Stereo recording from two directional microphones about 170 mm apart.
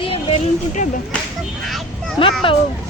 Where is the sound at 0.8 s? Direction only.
50° left (ahead or behind).